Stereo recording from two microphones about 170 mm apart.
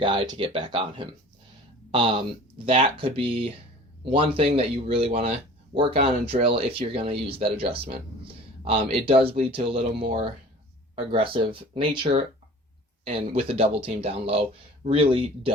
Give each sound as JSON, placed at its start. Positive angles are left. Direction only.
{"t": 0.0, "sound": "speech", "side_deg": -30}
{"t": 11.7, "sound": "speech", "side_deg": -30}
{"t": 13.3, "sound": "speech", "side_deg": -35}